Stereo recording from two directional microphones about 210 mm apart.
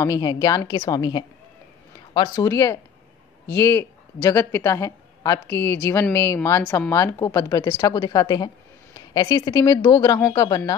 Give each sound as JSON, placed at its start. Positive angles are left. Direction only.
{"t": 0.0, "sound": "a woman's voice", "side_deg": 20}